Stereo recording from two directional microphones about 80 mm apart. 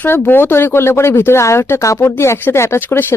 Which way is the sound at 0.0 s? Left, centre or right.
Left.